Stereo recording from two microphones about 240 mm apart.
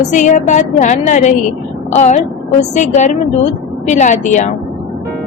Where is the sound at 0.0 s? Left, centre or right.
Left.